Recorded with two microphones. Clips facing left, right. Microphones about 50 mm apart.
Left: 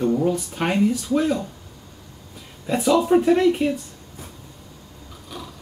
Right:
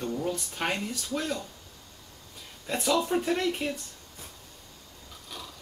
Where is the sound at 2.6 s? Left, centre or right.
Centre.